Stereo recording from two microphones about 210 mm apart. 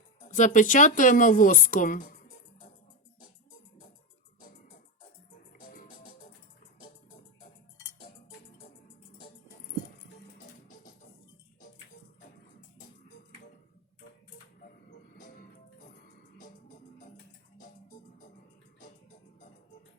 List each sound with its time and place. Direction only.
0.2 s speech: 35° left (ahead or behind)
4.4 s music: 40° left (ahead or behind)
15.2 s music: 40° left (ahead or behind)